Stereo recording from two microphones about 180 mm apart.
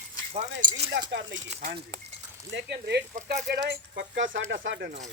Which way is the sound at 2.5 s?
70° right (ahead or behind).